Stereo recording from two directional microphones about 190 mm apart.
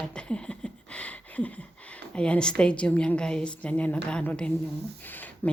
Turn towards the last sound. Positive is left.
turn(degrees=10)  # may be behind; listen again after turning